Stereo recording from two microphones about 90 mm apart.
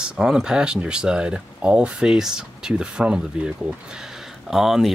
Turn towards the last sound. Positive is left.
turn(degrees=0)  # may be behind; listen again after turning